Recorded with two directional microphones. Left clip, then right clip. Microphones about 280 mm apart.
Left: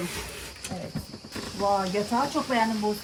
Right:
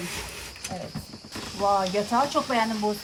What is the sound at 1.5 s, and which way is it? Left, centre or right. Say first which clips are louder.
Speech: right 2 dB; right.